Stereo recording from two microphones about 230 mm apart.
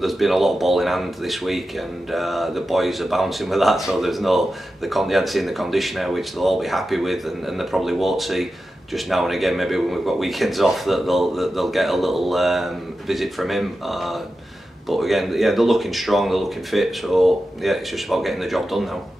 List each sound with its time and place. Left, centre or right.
0.0 s speech: centre